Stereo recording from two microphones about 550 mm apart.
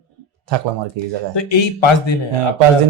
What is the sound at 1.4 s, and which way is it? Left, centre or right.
Speech, left.